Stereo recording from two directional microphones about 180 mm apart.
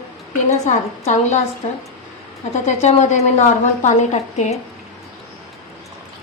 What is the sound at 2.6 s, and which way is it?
A woman's voice, 40° left (ahead or behind).